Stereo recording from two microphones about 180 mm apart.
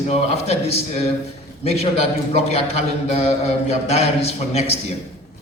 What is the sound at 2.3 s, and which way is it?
A man's voice, 35° left (ahead or behind).